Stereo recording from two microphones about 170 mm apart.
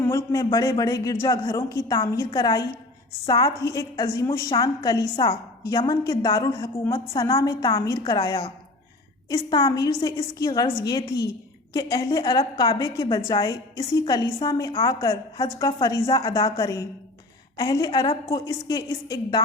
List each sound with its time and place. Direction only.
0.0 s a man's voice: 20° left (ahead or behind)
5.6 s a man's voice: 20° left (ahead or behind)